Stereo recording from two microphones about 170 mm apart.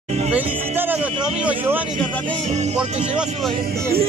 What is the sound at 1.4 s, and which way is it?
Speech, 10° right (ahead or behind).